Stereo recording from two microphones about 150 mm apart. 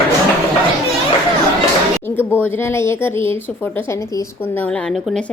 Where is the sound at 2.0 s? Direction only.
15° left (ahead or behind).